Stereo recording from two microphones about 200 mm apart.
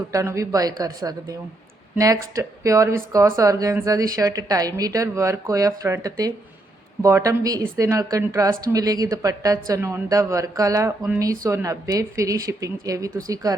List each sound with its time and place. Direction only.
0.1 s speech: 15° right (ahead or behind)